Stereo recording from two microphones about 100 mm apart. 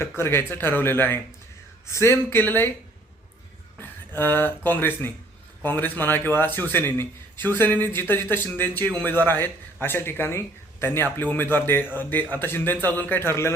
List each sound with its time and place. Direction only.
0.2 s speech: 20° left (ahead or behind)
3.8 s speech: 20° left (ahead or behind)